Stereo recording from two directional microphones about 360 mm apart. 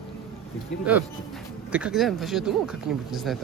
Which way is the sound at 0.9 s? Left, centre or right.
Centre.